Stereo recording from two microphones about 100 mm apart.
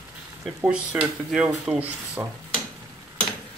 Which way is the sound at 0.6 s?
10° right (ahead or behind).